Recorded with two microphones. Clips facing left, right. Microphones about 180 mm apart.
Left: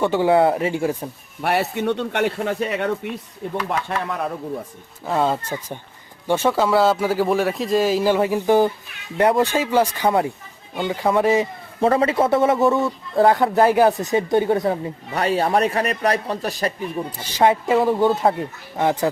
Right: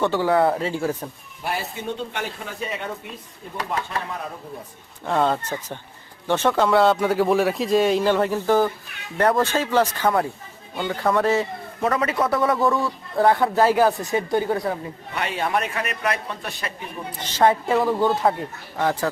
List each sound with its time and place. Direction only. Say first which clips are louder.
0.0 s speech: left 3 dB; 15° left (ahead or behind)
1.4 s speech: left 8 dB; 70° left (ahead or behind)
5.0 s speech: left 1 dB; 5° left (ahead or behind)
11.8 s speech: left 5 dB; 30° left (ahead or behind)
15.1 s a man's voice: left 5 dB; 35° left (ahead or behind)
17.2 s speech: left 1 dB; 10° left (ahead or behind)